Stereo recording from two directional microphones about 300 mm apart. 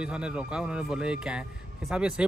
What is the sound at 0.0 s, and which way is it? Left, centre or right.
Speech, centre.